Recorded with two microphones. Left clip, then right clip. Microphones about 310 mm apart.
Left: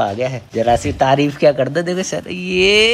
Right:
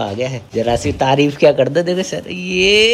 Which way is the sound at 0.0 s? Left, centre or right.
Centre.